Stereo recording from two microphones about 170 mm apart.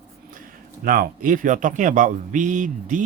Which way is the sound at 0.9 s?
55° right (ahead or behind).